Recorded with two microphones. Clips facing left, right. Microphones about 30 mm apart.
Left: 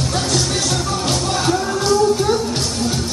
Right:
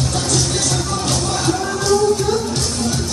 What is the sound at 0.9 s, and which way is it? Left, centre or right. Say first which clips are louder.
Music: left 1 dB; centre.